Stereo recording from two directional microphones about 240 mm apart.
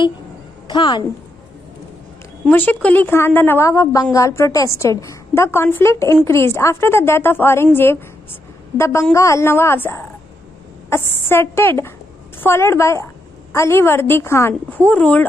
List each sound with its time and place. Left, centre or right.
0.7 s a woman's voice: centre
2.4 s a woman's voice: centre